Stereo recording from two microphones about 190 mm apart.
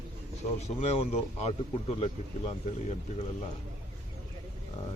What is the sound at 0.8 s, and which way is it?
Speech, 35° left (ahead or behind).